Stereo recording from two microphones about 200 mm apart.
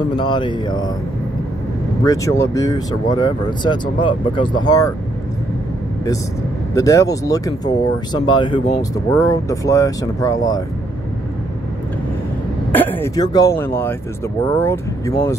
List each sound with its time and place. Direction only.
0.0 s speech: 25° left (ahead or behind)
2.0 s speech: 15° left (ahead or behind)
6.7 s speech: 15° left (ahead or behind)
12.7 s speech: 10° left (ahead or behind)